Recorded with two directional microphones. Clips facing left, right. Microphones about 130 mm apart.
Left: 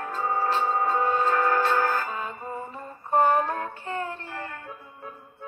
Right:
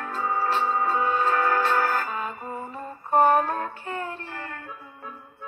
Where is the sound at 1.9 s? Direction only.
35° right (ahead or behind).